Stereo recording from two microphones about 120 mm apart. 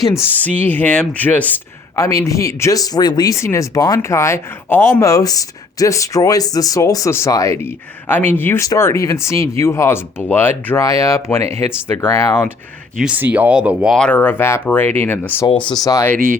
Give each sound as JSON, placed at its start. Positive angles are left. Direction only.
{"t": 0.0, "sound": "speech", "side_deg": 20}
{"t": 2.0, "sound": "speech", "side_deg": 25}
{"t": 13.0, "sound": "speech", "side_deg": -10}
{"t": 13.9, "sound": "speech", "side_deg": 5}
{"t": 14.2, "sound": "speech", "side_deg": 20}
{"t": 15.8, "sound": "speech", "side_deg": 30}